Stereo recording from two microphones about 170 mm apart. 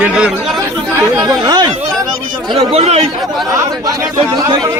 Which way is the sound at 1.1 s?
20° right (ahead or behind).